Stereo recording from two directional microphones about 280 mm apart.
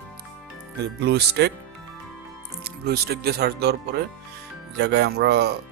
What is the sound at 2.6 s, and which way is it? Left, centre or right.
Speech, right.